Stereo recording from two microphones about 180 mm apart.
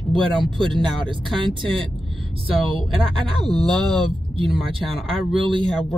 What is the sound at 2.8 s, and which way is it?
Speech, centre (ahead or behind).